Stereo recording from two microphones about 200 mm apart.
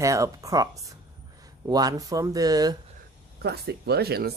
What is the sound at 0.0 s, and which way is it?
Speech, 15° right (ahead or behind).